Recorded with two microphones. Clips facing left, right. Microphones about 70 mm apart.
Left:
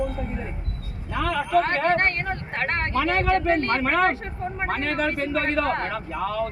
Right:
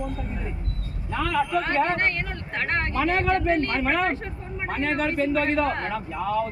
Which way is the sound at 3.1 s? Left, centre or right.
Left.